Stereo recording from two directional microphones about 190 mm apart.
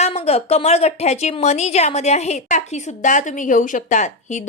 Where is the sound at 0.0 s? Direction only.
35° left (ahead or behind).